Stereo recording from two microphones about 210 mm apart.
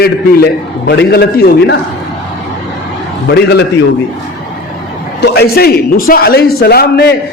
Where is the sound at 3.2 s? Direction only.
50° left (ahead or behind).